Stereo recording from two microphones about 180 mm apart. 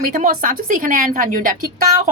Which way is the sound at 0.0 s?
50° right (ahead or behind).